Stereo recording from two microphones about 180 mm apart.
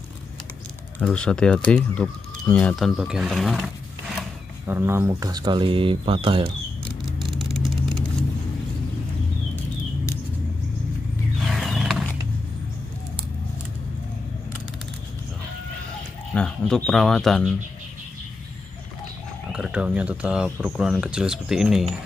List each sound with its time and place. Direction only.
0.9 s speech: 5° left (ahead or behind)
4.6 s speech: 10° right (ahead or behind); by 6.5 s 30° right (ahead or behind)
7.1 s vehicle: centre (ahead or behind)
11.3 s wild animals: centre (ahead or behind)
16.3 s speech: 5° left (ahead or behind)
19.5 s speech: 5° right (ahead or behind)